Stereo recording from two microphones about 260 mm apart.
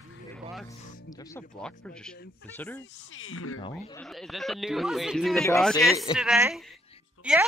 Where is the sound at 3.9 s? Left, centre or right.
Centre.